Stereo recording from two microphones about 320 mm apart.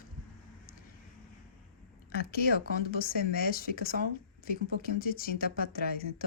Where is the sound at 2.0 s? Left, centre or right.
Left.